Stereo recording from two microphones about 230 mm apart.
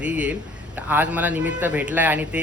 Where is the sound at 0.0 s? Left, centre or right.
Centre.